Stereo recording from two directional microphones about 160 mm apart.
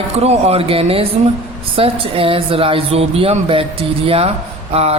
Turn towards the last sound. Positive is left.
turn(degrees=-40)  # may be behind; listen again after turning